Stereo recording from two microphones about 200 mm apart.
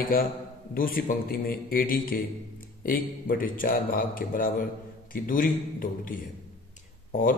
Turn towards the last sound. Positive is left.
turn(degrees=45)  # may be behind; listen again after turning